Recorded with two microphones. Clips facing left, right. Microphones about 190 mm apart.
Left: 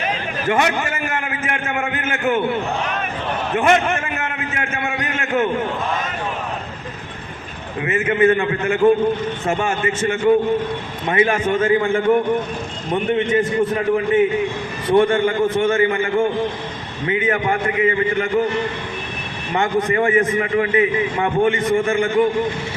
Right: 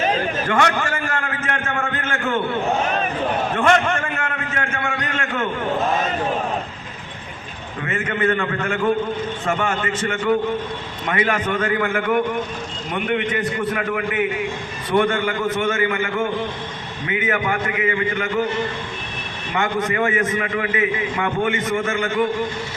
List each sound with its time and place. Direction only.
0.4 s a man's voice: 20° left (ahead or behind)
3.5 s a man's voice: 20° left (ahead or behind)
7.9 s a man's voice: 20° left (ahead or behind)
19.5 s a man's voice: 30° left (ahead or behind)